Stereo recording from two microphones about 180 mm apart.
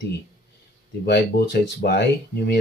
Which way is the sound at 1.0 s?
70° left (ahead or behind).